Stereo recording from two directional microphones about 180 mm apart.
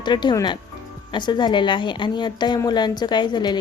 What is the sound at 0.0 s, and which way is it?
A woman's voice, 25° left (ahead or behind).